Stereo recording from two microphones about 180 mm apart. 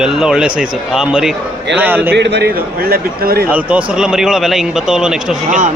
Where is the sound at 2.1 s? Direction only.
75° right (ahead or behind); by 3.4 s 55° right (ahead or behind).